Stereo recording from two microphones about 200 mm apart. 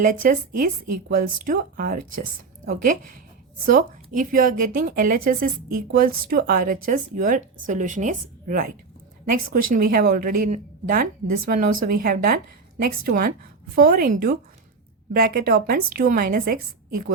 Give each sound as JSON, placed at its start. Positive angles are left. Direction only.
{"t": 0.0, "sound": "a woman's voice", "side_deg": -40}